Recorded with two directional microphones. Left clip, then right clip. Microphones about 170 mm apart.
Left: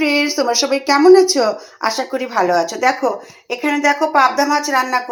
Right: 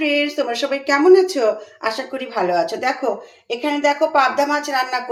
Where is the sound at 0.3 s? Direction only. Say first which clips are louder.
Left 4 dB; 15° left (ahead or behind).